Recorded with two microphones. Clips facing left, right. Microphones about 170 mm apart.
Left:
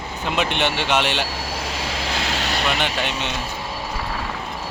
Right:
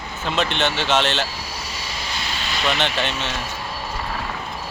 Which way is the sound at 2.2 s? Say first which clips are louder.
Left 3 dB; 80° left.